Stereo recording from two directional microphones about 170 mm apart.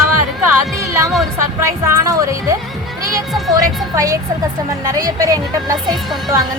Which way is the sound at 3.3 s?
Centre (ahead or behind).